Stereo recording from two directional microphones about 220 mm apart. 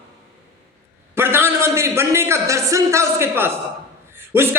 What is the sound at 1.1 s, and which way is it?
A man's voice, 10° right (ahead or behind).